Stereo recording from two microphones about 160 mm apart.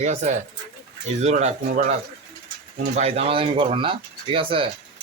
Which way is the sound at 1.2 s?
45° right (ahead or behind).